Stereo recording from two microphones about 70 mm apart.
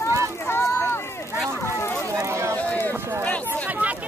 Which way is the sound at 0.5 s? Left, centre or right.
Left.